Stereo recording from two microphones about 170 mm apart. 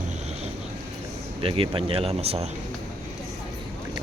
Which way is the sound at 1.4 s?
30° right (ahead or behind).